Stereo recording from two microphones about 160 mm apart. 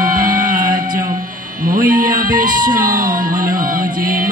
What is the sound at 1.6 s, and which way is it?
Music, 55° right (ahead or behind).